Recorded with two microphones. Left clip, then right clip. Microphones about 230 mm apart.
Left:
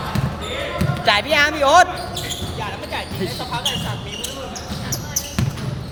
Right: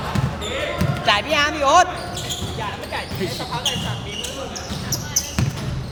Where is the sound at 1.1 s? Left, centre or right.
Left.